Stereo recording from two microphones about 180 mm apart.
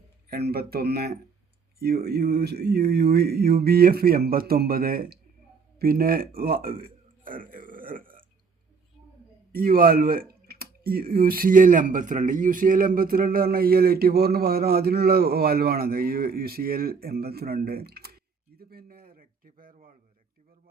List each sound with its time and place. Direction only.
0.3 s a man's voice: 60° right (ahead or behind)
9.5 s speech: 55° right (ahead or behind)